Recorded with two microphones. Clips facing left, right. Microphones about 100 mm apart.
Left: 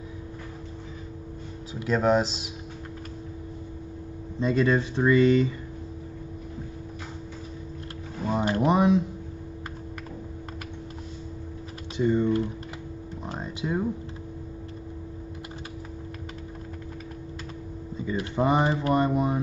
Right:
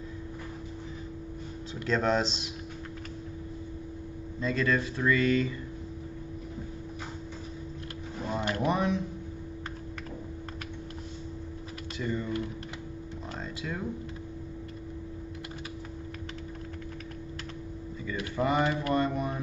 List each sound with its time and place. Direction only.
1.9 s speech: 10° left (ahead or behind)
4.4 s speech: 20° left (ahead or behind)
8.3 s a sound: 25° left (ahead or behind)
12.0 s speech: 25° left (ahead or behind)
13.4 s music: 20° left (ahead or behind)
17.9 s speech: 25° left (ahead or behind)